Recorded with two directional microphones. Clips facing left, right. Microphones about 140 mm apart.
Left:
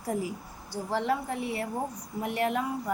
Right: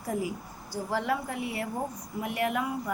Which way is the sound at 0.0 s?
30° left (ahead or behind).